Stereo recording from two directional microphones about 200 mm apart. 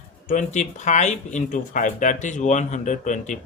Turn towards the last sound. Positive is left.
turn(degrees=40)  # may be behind; listen again after turning